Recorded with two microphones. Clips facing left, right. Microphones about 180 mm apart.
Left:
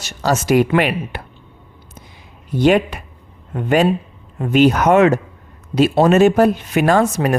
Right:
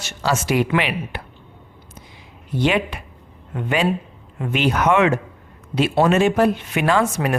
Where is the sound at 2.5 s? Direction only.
45° left (ahead or behind).